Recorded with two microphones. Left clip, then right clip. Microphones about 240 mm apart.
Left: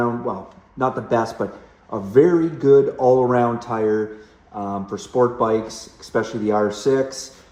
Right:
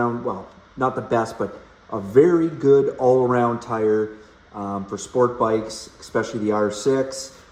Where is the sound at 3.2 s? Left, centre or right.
Left.